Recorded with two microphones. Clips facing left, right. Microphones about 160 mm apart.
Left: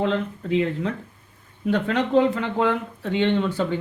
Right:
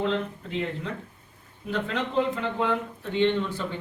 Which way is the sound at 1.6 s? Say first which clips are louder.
Left 7 dB; 75° left (ahead or behind).